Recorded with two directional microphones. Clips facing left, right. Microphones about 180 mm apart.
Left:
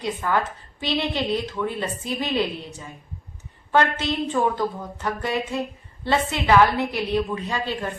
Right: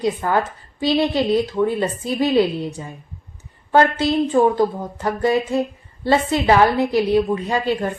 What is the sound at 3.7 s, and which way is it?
A woman's voice, 35° right (ahead or behind).